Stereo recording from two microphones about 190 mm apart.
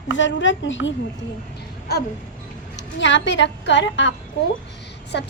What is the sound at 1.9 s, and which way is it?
Speech, 55° left (ahead or behind).